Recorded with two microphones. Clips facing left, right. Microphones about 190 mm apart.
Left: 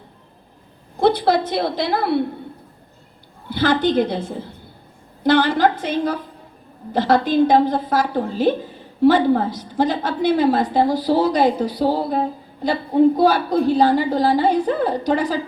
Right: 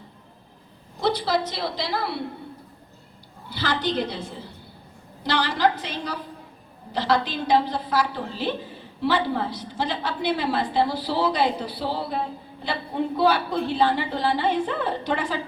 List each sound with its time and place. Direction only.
0.9 s a woman's voice: 55° left (ahead or behind)
3.5 s a woman's voice: 55° left (ahead or behind)